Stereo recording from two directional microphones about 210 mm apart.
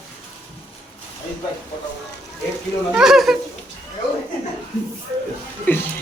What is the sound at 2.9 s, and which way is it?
Speech, centre (ahead or behind).